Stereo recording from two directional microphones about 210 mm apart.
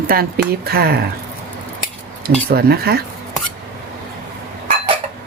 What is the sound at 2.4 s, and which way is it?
Speech, 50° right (ahead or behind).